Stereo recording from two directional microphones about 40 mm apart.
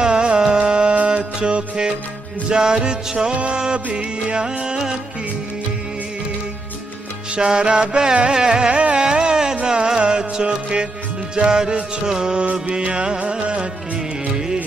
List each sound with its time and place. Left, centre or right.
0.0 s music: right
7.3 s music: right